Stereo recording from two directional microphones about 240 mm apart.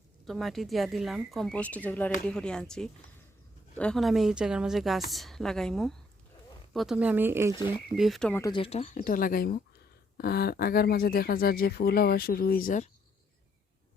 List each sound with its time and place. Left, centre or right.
0.3 s speech: centre; by 8.9 s left
9.0 s speech: left